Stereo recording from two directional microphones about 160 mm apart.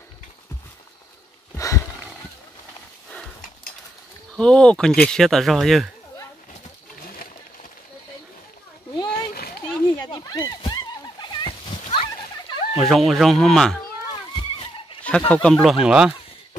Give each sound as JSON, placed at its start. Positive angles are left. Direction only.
{"t": 4.4, "sound": "speech", "side_deg": 5}
{"t": 8.9, "sound": "splash", "side_deg": 25}
{"t": 9.3, "sound": "a sound", "side_deg": 70}
{"t": 9.8, "sound": "splash", "side_deg": 25}
{"t": 12.7, "sound": "speech", "side_deg": 0}
{"t": 14.3, "sound": "vehicle", "side_deg": 35}
{"t": 15.0, "sound": "speech", "side_deg": 10}